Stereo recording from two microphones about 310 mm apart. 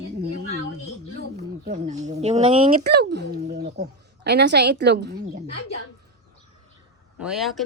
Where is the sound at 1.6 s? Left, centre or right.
Right.